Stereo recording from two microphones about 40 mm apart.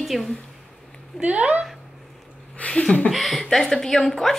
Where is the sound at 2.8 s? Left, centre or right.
Left.